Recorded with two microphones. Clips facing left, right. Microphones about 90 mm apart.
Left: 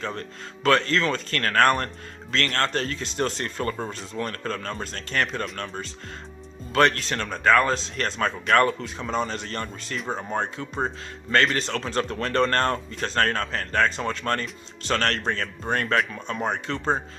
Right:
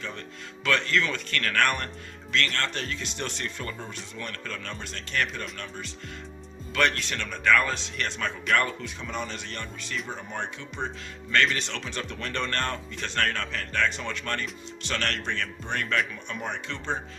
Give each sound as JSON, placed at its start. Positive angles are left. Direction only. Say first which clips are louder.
{"t": 0.0, "sound": "speech", "louder": "left 6 dB", "side_deg": 40}